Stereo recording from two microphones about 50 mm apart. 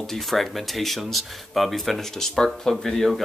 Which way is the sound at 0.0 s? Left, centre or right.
Centre.